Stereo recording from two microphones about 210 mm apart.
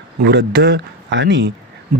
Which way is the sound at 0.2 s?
55° right (ahead or behind).